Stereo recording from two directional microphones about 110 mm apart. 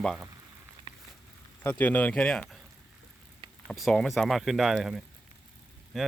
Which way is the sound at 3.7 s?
Centre (ahead or behind).